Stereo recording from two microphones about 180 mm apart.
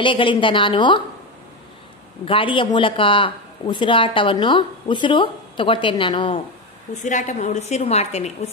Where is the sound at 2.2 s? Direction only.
30° left (ahead or behind).